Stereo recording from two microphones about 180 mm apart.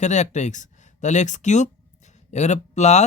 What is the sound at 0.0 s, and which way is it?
Speech, 40° left (ahead or behind).